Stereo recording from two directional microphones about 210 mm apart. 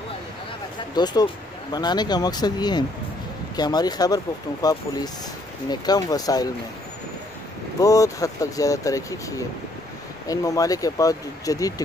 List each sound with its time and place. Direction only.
0.9 s speech: 20° left (ahead or behind)
7.8 s speech: 15° left (ahead or behind)
10.2 s speech: 15° left (ahead or behind)